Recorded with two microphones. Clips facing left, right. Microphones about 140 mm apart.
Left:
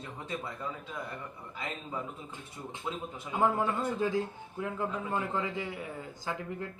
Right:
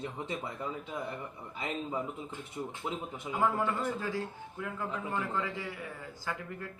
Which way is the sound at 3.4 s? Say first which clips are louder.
Left 2 dB; 20° left (ahead or behind).